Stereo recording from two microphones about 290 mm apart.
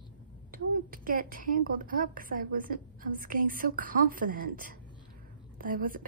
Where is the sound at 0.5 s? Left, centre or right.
Right.